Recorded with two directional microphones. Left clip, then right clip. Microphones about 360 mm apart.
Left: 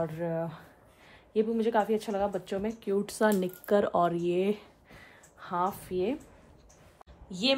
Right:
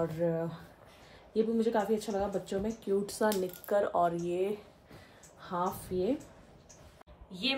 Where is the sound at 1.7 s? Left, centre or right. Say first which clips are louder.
Left 3 dB; left.